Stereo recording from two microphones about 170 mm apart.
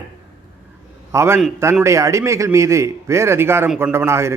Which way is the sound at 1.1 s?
15° right (ahead or behind).